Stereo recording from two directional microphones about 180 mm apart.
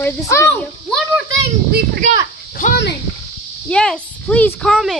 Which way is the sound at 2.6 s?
45° left (ahead or behind).